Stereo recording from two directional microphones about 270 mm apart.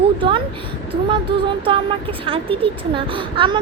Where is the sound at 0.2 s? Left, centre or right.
Centre.